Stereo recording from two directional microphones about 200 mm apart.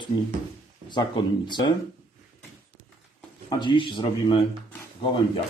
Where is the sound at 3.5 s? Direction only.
20° left (ahead or behind).